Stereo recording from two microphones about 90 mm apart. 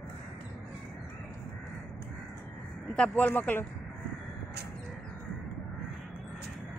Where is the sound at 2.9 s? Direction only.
15° left (ahead or behind).